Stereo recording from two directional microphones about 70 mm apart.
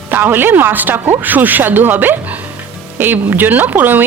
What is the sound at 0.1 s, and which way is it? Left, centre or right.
Speech, right.